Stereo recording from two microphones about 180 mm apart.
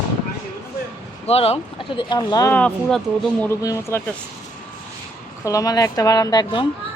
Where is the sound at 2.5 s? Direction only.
5° left (ahead or behind).